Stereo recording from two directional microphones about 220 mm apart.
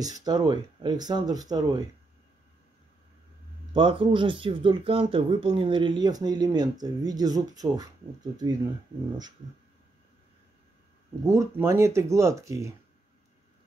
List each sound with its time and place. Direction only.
0.0 s speech: 15° right (ahead or behind)
3.7 s speech: 20° right (ahead or behind)
11.2 s speech: 10° right (ahead or behind)